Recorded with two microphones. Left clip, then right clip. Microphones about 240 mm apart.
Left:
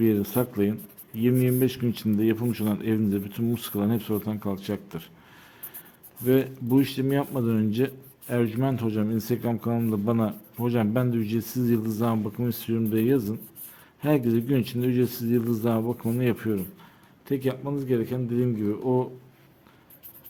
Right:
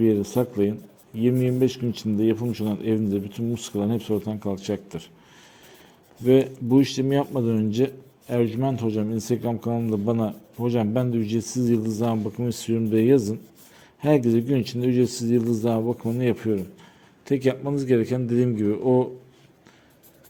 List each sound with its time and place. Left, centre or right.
0.0 s speech: centre
6.2 s speech: centre
17.2 s a man's voice: centre